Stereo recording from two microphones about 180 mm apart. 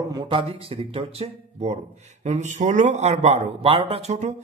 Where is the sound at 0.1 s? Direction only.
25° right (ahead or behind).